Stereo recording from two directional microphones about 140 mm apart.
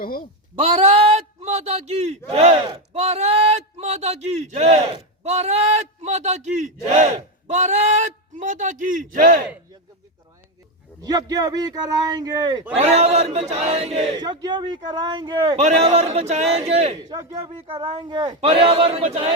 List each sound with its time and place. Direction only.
0.0 s speech: 90° left
0.5 s a man's voice: 45° right (ahead or behind); by 9.4 s 75° right (ahead or behind)
11.0 s a man's voice: 25° right (ahead or behind)
12.7 s speech: 50° right (ahead or behind)
14.2 s a man's voice: 30° right (ahead or behind)
15.5 s speech: 50° right (ahead or behind)
17.0 s a man's voice: 30° right (ahead or behind)
18.3 s speech: 45° right (ahead or behind)